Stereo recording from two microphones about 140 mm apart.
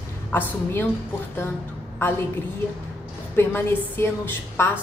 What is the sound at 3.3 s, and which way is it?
Speech, 15° left (ahead or behind).